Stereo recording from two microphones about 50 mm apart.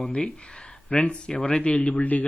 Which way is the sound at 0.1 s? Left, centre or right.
Left.